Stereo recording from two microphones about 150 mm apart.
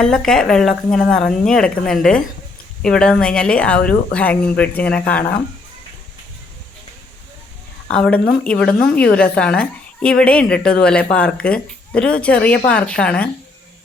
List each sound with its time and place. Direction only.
0.0 s a woman's voice: 5° left (ahead or behind)
7.9 s a woman's voice: 5° left (ahead or behind)